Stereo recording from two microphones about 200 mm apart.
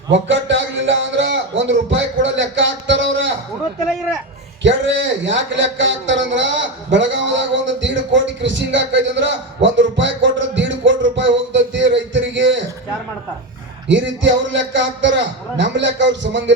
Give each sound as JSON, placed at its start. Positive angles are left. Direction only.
{"t": 0.1, "sound": "a sound", "side_deg": -65}
{"t": 4.6, "sound": "a man's voice", "side_deg": -65}
{"t": 13.8, "sound": "a man's voice", "side_deg": -65}